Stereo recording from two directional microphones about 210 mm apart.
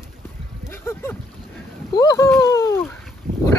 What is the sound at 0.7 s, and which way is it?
Boat, 10° left (ahead or behind).